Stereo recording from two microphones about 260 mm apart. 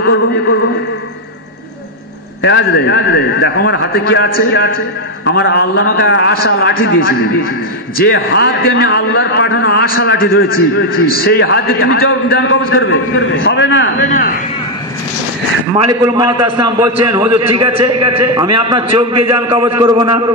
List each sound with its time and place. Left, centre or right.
0.0 s a man's voice: left
2.4 s a man's voice: left
13.9 s a man's voice: left
15.8 s a man's voice: centre